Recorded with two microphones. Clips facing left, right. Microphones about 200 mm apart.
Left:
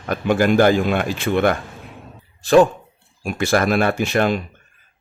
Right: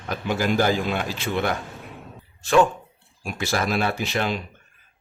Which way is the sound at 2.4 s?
35° left (ahead or behind).